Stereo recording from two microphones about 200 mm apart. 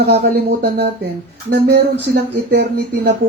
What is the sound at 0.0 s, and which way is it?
Speech, 55° right (ahead or behind).